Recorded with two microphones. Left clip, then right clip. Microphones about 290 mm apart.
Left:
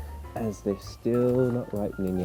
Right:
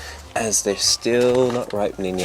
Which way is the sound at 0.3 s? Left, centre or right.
Centre.